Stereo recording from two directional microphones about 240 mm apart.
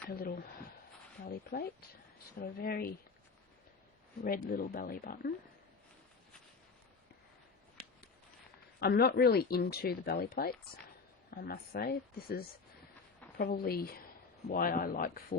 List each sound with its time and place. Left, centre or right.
0.1 s speech: left
4.2 s speech: left
8.8 s speech: left